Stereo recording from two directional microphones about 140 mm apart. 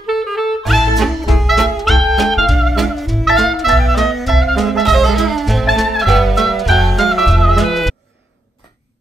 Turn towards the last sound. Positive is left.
turn(degrees=0)  # may be behind; listen again after turning